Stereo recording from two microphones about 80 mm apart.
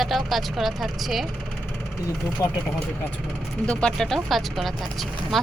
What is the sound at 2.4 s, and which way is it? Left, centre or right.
Speech, left.